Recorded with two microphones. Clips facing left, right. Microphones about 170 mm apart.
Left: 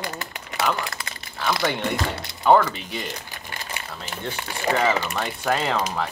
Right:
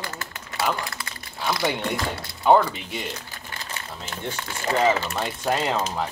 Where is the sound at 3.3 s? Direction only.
15° left (ahead or behind).